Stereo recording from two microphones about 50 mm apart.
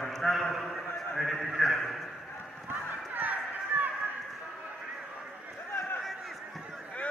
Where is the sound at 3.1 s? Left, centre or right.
Right.